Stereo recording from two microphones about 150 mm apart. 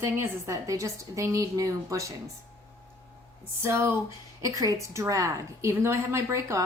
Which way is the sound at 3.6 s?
15° right (ahead or behind).